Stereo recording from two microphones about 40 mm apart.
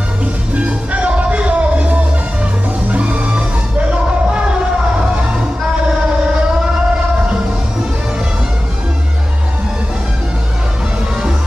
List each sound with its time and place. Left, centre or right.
0.2 s music: right